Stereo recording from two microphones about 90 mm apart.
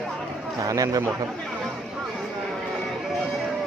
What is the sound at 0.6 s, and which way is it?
Speech, 40° right (ahead or behind).